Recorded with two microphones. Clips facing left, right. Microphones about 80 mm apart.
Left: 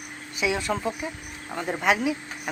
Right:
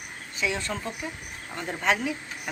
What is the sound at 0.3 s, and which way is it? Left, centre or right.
Speech, centre.